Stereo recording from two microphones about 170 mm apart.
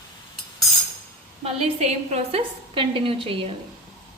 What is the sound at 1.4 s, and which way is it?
A woman's voice, 40° right (ahead or behind).